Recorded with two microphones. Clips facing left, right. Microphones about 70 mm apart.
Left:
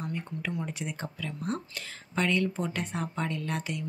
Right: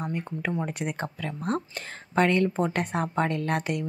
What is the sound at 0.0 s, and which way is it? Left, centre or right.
Speech, right.